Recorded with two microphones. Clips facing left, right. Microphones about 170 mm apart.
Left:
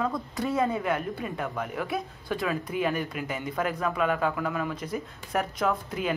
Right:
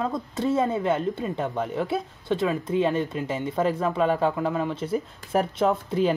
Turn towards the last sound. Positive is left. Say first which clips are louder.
# right 6 dB
turn(degrees=-30)  # may be behind; listen again after turning